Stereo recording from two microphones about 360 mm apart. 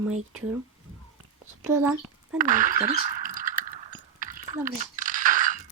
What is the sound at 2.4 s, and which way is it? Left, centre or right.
Speech, right.